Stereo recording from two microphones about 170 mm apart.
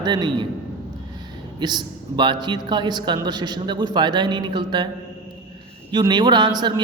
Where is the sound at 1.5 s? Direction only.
25° right (ahead or behind).